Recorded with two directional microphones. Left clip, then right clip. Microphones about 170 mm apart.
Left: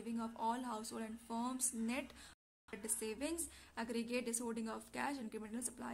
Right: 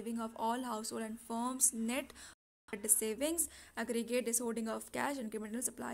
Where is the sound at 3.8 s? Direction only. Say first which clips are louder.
Right 6 dB; 35° right (ahead or behind).